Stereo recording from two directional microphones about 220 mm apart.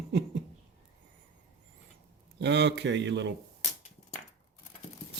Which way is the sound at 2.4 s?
50° right (ahead or behind).